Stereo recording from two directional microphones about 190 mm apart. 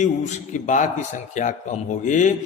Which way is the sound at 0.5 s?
40° left (ahead or behind).